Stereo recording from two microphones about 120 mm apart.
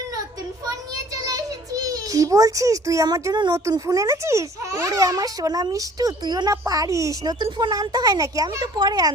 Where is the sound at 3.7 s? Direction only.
30° right (ahead or behind).